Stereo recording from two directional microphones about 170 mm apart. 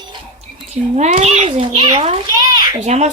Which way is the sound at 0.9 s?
40° right (ahead or behind).